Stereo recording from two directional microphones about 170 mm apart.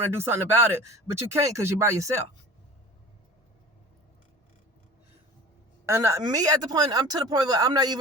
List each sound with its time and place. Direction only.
0.0 s speech: 15° right (ahead or behind)
5.9 s speech: 15° right (ahead or behind)